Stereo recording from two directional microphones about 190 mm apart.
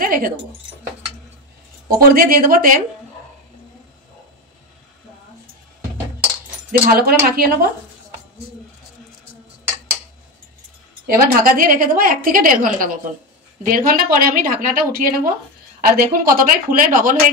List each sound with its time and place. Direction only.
0.0 s speech: 50° right (ahead or behind)
2.0 s a woman's voice: 50° right (ahead or behind)
6.9 s a woman's voice: 50° right (ahead or behind)
11.1 s a woman's voice: 50° right (ahead or behind)